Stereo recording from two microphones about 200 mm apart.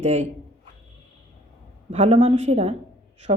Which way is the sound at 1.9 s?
35° right (ahead or behind).